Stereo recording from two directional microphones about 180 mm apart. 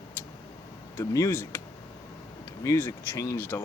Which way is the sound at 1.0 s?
15° left (ahead or behind).